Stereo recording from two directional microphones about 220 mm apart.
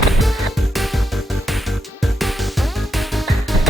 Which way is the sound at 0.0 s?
Centre (ahead or behind).